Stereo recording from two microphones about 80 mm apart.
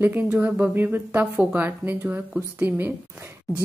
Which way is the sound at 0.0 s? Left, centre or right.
Right.